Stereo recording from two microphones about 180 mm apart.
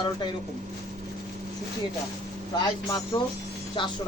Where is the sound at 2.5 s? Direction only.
25° left (ahead or behind).